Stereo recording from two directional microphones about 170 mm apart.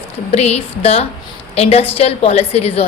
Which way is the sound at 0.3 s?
40° left (ahead or behind).